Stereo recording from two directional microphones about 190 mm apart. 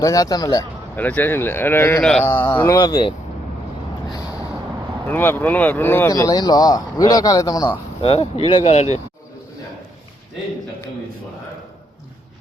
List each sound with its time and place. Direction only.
0.0 s a man's voice: 20° left (ahead or behind)
5.0 s speech: 10° left (ahead or behind)
8.0 s speech: 30° left (ahead or behind)